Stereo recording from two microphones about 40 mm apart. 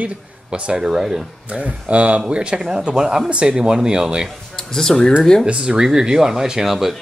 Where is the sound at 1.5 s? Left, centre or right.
Right.